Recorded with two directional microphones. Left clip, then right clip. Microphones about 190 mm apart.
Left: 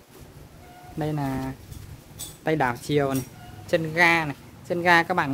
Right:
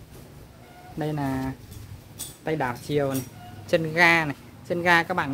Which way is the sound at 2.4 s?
40° left (ahead or behind).